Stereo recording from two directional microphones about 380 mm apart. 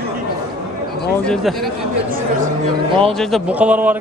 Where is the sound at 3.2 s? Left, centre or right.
Centre.